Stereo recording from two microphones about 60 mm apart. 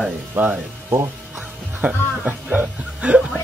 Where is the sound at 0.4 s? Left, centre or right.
Right.